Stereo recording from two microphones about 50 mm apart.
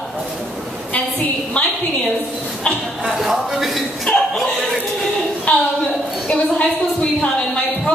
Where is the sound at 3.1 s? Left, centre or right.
Centre.